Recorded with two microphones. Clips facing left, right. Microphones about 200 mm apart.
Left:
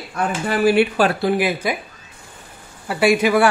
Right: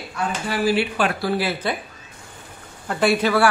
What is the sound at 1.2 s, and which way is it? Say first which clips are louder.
Speech: left 4 dB; 20° left (ahead or behind).